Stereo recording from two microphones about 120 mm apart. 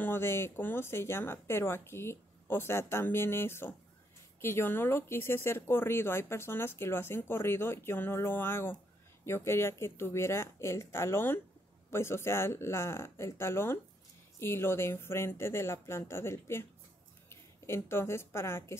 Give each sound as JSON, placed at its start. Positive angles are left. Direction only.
{"t": 0.0, "sound": "speech", "side_deg": 20}